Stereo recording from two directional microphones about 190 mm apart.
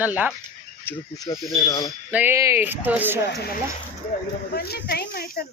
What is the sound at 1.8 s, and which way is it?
Speech, 10° right (ahead or behind).